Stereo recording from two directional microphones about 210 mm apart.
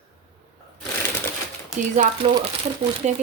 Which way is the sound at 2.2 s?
25° right (ahead or behind).